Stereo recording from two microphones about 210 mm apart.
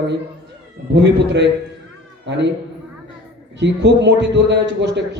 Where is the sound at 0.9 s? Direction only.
55° right (ahead or behind).